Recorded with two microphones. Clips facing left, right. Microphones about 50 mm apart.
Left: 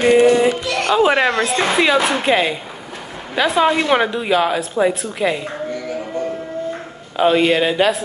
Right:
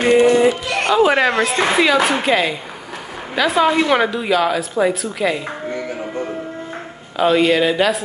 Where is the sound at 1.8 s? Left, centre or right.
Left.